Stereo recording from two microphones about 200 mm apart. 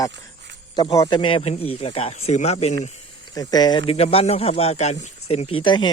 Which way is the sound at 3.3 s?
20° left (ahead or behind).